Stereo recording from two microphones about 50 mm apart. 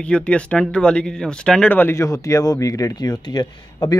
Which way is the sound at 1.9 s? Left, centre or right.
Left.